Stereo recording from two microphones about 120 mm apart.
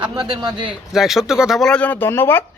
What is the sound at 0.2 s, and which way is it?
Speech, 40° right (ahead or behind).